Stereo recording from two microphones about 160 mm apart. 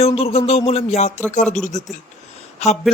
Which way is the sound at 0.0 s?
40° left (ahead or behind).